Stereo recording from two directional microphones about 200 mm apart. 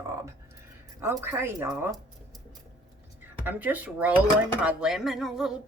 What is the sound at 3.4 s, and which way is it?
Speech, 10° right (ahead or behind).